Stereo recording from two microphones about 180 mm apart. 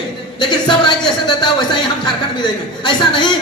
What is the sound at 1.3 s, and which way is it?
A man's voice, 25° left (ahead or behind).